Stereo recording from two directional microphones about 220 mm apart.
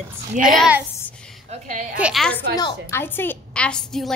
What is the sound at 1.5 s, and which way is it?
Speech, 35° right (ahead or behind).